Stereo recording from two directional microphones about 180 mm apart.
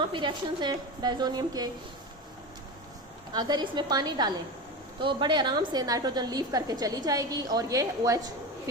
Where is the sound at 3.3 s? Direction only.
25° right (ahead or behind).